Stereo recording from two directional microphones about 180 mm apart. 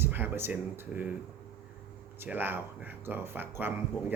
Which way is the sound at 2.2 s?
10° right (ahead or behind).